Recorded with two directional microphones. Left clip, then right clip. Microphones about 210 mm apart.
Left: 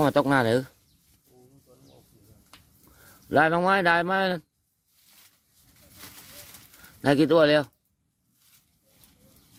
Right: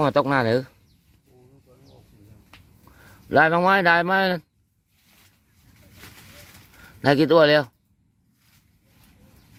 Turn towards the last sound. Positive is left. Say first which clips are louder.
# right 3 dB
turn(degrees=0)  # may be behind; listen again after turning